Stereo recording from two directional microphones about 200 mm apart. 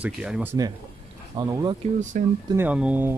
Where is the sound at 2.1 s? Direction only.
40° right (ahead or behind).